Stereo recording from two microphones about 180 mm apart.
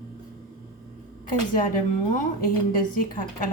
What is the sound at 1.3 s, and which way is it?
A woman's voice, 50° left (ahead or behind).